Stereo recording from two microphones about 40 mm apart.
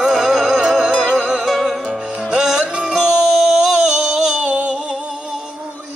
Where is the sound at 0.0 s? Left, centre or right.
Centre.